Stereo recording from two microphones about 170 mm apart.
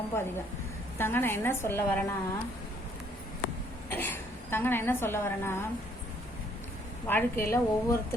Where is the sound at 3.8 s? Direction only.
10° left (ahead or behind).